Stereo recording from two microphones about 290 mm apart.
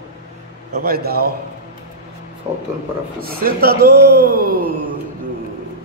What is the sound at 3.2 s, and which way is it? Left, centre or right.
Speech, right.